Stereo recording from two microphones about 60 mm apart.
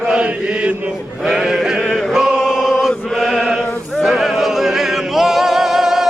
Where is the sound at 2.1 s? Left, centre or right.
Centre.